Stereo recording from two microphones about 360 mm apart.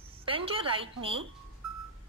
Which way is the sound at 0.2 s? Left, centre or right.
Centre.